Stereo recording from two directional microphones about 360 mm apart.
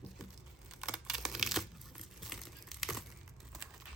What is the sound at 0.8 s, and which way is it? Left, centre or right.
Computer keyboard, centre.